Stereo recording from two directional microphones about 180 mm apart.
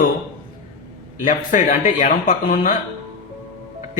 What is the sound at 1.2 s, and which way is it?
Speech, 50° left (ahead or behind).